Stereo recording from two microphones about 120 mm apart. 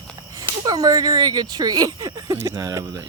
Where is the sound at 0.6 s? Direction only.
30° right (ahead or behind).